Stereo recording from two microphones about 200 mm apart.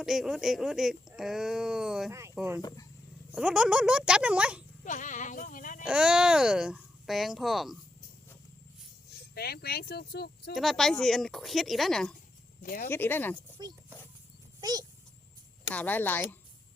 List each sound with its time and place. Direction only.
0.0 s speech: centre (ahead or behind)
2.6 s speech: 20° left (ahead or behind)
3.3 s speech: 5° right (ahead or behind)
4.9 s speech: 40° left (ahead or behind)
5.8 s speech: 5° right (ahead or behind)
9.3 s speech: 50° left (ahead or behind)
10.5 s speech: centre (ahead or behind)
12.6 s speech: 40° left (ahead or behind)
12.9 s a woman's voice: 10° left (ahead or behind)
14.6 s speech: 20° right (ahead or behind)
15.7 s a woman's voice: 10° left (ahead or behind)